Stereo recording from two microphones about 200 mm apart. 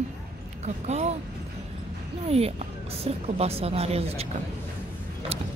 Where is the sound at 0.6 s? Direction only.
35° right (ahead or behind).